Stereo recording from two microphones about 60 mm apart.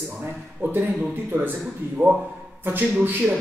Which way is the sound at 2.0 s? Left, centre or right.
Right.